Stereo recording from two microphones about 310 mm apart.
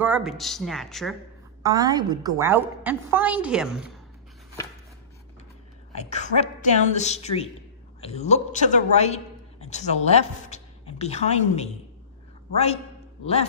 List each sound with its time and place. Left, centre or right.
0.0 s speech: centre
1.6 s a woman's voice: centre
5.9 s a woman's voice: left
13.2 s a woman's voice: centre